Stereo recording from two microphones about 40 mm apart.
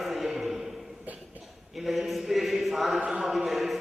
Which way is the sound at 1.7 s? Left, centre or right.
Centre.